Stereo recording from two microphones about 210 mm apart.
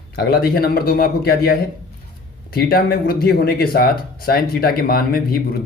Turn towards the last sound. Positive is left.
turn(degrees=45)  # may be behind; listen again after turning